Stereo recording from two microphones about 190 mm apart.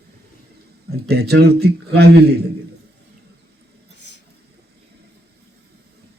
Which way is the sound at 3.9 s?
65° left (ahead or behind).